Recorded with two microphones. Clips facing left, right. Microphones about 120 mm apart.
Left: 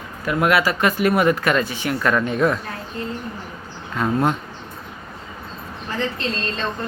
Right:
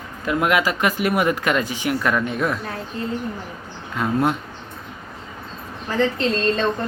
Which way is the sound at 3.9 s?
10° right (ahead or behind).